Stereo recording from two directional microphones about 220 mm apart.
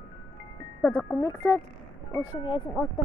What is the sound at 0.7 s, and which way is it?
Speech, 5° left (ahead or behind).